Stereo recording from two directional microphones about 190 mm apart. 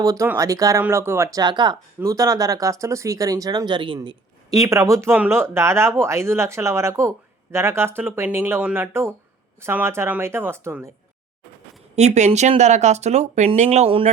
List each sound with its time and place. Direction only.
0.0 s speech: 15° right (ahead or behind)
11.9 s speech: 35° right (ahead or behind)